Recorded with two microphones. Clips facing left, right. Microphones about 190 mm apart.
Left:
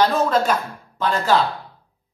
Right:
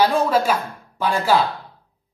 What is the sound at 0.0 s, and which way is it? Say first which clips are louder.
Speech: even; 10° right (ahead or behind).